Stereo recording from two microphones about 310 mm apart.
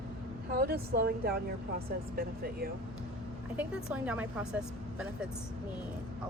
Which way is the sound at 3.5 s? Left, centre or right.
Centre.